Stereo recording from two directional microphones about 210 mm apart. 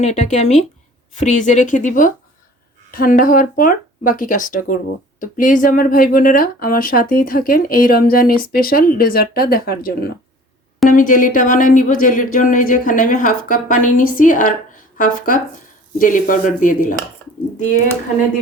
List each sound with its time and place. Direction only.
0.0 s speech: 35° left (ahead or behind)